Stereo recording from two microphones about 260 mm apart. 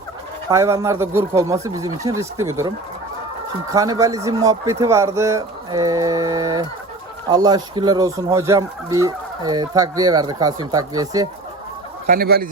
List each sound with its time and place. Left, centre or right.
0.5 s speech: centre
12.0 s speech: right